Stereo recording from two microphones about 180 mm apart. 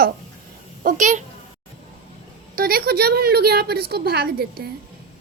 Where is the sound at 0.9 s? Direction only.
45° right (ahead or behind).